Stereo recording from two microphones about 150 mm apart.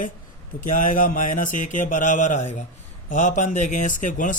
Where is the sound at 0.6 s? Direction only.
60° left (ahead or behind).